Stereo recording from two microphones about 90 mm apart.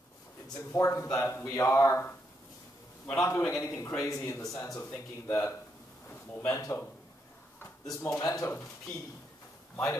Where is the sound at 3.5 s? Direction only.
30° left (ahead or behind).